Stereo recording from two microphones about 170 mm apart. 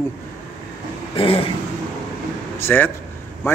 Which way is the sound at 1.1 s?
35° left (ahead or behind).